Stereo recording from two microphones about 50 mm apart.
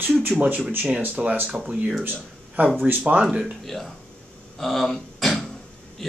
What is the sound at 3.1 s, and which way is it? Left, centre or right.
Speech, centre.